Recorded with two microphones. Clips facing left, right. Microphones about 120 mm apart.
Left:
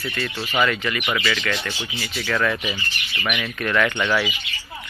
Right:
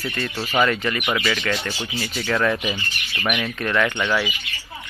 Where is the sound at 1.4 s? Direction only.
5° right (ahead or behind).